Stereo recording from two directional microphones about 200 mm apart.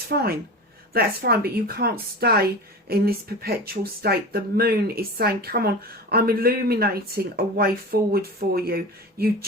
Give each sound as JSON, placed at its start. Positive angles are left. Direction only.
{"t": 0.1, "sound": "speech", "side_deg": -50}